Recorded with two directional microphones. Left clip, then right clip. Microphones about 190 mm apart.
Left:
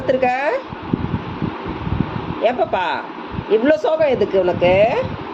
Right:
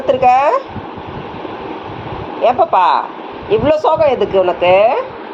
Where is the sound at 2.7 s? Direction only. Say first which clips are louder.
Right 9 dB; 15° left (ahead or behind).